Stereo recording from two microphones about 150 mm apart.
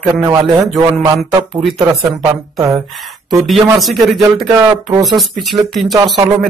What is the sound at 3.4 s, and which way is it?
Speech, centre (ahead or behind).